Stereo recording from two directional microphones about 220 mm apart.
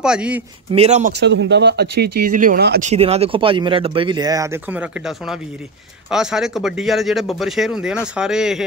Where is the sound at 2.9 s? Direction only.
30° right (ahead or behind).